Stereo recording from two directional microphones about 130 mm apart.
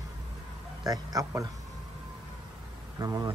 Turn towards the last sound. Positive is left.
turn(degrees=-30)  # may be behind; listen again after turning